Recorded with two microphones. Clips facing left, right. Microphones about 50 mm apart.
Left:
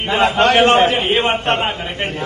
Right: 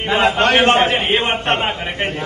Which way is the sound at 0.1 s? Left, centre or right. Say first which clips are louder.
Left 1 dB; right.